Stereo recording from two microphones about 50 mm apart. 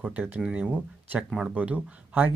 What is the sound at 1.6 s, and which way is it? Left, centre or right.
Speech, right.